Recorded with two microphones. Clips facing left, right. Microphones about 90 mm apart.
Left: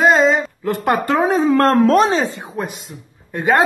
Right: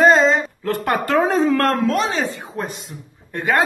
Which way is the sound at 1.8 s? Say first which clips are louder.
Left 6 dB; 40° left (ahead or behind).